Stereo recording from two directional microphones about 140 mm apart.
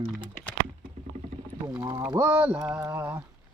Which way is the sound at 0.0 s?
10° right (ahead or behind).